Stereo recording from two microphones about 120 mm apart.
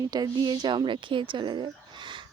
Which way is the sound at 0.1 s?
35° right (ahead or behind).